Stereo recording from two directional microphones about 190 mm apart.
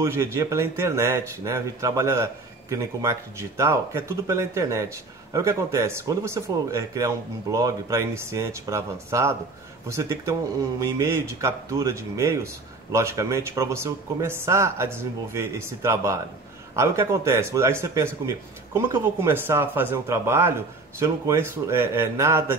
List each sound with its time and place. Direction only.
0.0 s speech: 15° right (ahead or behind)